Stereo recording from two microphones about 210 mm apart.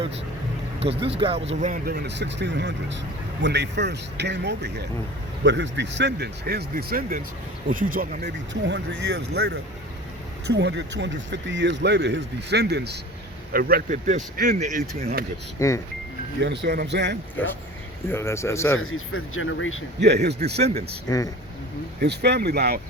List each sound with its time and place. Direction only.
0.8 s speech: 25° right (ahead or behind)
8.6 s speech: 55° right (ahead or behind); by 15.1 s 30° right (ahead or behind)
15.5 s speech: 15° left (ahead or behind)
16.4 s speech: 55° right (ahead or behind)
18.1 s speech: 10° left (ahead or behind)
18.8 s speech: 80° left
20.2 s speech: 50° right (ahead or behind)
21.1 s speech: 15° left (ahead or behind)
22.0 s speech: 50° right (ahead or behind)